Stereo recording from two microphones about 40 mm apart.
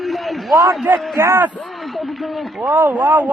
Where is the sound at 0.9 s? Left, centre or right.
Right.